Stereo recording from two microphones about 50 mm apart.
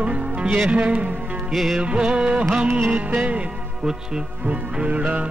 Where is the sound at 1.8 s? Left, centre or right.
Right.